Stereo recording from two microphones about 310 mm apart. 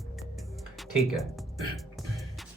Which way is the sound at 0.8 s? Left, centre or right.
Centre.